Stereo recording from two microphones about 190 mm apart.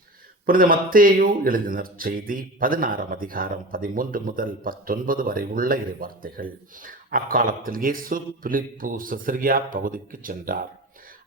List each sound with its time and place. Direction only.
0.4 s speech: 50° right (ahead or behind)